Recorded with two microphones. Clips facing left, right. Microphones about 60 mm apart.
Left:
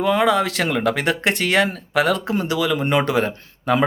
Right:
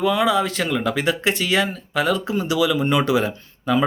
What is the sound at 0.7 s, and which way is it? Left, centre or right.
Speech, left.